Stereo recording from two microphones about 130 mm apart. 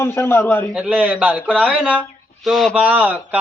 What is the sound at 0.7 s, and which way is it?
A man's voice, 10° right (ahead or behind).